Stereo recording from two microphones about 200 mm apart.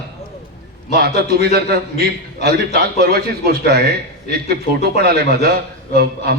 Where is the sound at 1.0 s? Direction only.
50° right (ahead or behind).